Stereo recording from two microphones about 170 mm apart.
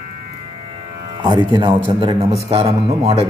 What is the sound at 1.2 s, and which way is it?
Speech, 25° right (ahead or behind).